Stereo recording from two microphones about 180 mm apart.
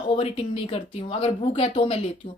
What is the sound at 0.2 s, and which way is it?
A woman's voice, 30° left (ahead or behind).